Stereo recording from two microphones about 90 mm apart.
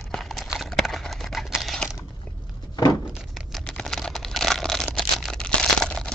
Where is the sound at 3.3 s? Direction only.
Centre (ahead or behind).